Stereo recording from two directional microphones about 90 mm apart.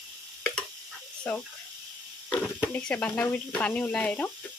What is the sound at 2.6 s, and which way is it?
Speech, 15° left (ahead or behind).